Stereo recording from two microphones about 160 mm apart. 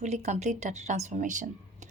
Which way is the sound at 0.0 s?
45° right (ahead or behind).